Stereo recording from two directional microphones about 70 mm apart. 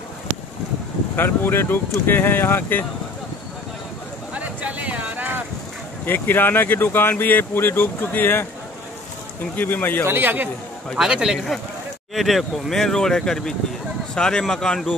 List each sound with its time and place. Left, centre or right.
1.1 s speech: left
4.3 s a sound: right
6.0 s speech: left
9.6 s speech: left
10.0 s a man's voice: right
11.0 s speech: centre
11.3 s speech: centre